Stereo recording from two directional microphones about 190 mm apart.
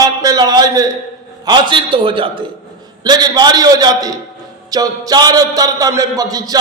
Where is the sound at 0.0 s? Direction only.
20° right (ahead or behind).